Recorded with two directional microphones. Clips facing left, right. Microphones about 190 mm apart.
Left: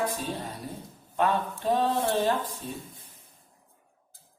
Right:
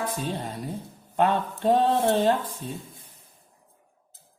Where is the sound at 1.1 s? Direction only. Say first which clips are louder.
Right 3 dB; 55° right (ahead or behind).